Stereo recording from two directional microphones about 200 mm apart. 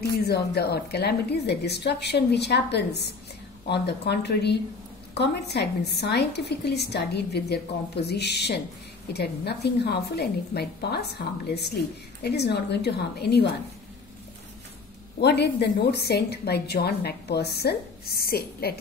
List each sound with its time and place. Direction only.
0.1 s a woman's voice: 55° left (ahead or behind)
15.1 s a woman's voice: 55° left (ahead or behind)